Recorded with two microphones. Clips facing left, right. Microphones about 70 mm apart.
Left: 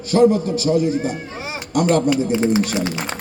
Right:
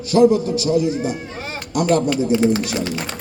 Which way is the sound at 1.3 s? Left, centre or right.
Centre.